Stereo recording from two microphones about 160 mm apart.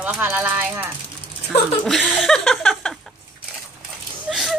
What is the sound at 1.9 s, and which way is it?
A woman's voice, centre (ahead or behind).